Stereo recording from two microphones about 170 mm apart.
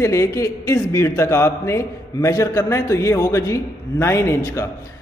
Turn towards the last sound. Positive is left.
turn(degrees=15)  # may be behind; listen again after turning